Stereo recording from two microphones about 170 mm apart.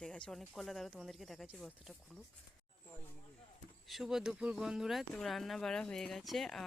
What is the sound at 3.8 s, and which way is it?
Speech, centre (ahead or behind).